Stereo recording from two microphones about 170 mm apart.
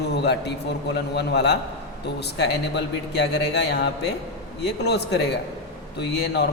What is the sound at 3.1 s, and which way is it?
A man's voice, 90° left.